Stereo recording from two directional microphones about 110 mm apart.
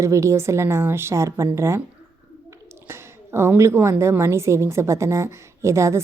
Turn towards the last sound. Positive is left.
turn(degrees=-25)  # may be behind; listen again after turning